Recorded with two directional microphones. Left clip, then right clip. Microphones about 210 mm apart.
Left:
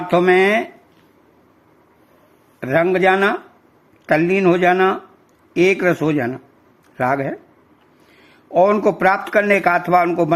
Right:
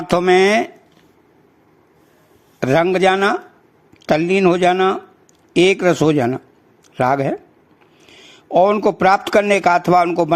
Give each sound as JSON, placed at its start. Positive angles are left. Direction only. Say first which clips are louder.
{"t": 0.1, "sound": "speech", "louder": "right 1 dB", "side_deg": -25}
{"t": 2.6, "sound": "speech", "louder": "right 1 dB", "side_deg": -20}
{"t": 8.4, "sound": "speech", "louder": "right 1 dB", "side_deg": -15}